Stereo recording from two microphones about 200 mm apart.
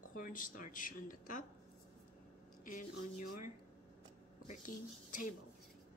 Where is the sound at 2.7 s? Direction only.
40° left (ahead or behind).